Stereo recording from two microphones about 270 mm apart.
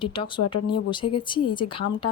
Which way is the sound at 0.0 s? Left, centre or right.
Centre.